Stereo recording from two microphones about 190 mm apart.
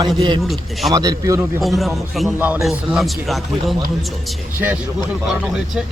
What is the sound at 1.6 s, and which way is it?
A man's voice, centre (ahead or behind).